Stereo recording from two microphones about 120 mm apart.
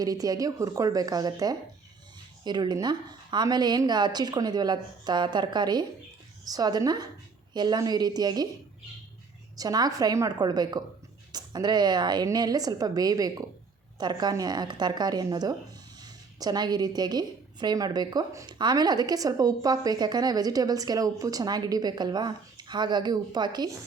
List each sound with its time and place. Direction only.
0.0 s a woman's voice: 30° right (ahead or behind)
9.6 s a woman's voice: 35° right (ahead or behind)